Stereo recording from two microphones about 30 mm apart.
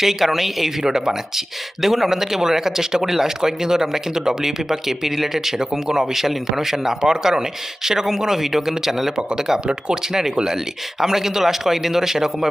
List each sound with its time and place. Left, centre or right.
0.0 s speech: centre
0.9 s speech: centre
5.5 s speech: centre